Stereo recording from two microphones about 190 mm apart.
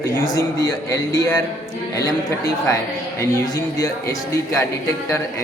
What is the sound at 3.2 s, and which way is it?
Speech, 15° left (ahead or behind).